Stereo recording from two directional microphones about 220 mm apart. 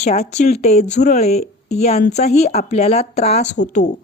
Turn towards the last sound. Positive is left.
turn(degrees=35)  # may be behind; listen again after turning